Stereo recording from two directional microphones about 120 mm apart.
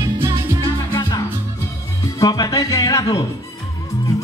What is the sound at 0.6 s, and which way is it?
Music, 35° left (ahead or behind).